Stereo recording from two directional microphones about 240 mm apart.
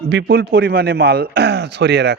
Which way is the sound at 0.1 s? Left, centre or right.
Right.